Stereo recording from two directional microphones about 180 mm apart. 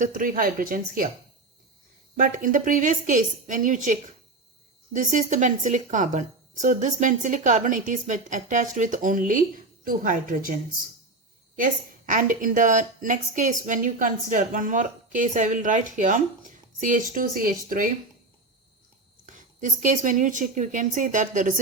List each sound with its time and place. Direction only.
0.0 s a woman's voice: 50° right (ahead or behind)
2.1 s a woman's voice: 45° right (ahead or behind)
4.9 s a woman's voice: 45° right (ahead or behind)
19.2 s a woman's voice: 45° right (ahead or behind)